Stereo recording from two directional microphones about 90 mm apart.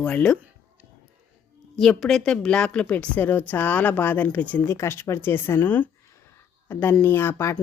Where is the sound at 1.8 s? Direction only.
5° left (ahead or behind).